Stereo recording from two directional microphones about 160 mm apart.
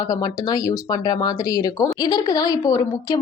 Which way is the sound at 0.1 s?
25° left (ahead or behind).